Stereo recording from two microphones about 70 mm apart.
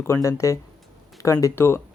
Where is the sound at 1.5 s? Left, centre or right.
Left.